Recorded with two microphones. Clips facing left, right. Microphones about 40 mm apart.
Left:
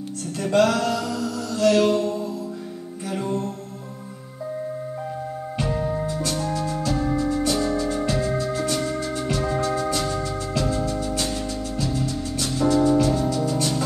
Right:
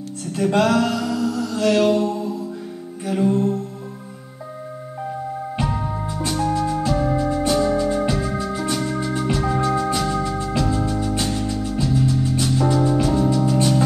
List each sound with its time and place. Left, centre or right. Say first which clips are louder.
0.5 s mantra: right 1 dB; centre
3.1 s music: right 7 dB; centre
5.6 s music: left 2 dB; centre